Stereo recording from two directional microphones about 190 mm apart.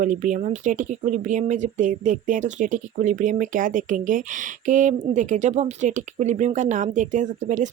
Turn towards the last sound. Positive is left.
turn(degrees=-40)  # may be behind; listen again after turning